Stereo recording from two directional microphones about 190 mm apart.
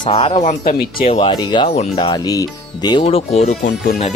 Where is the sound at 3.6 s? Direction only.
50° left (ahead or behind).